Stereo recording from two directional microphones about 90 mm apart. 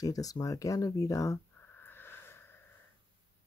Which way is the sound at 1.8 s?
25° left (ahead or behind).